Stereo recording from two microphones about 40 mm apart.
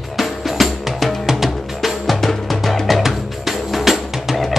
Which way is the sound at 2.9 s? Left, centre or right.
Centre.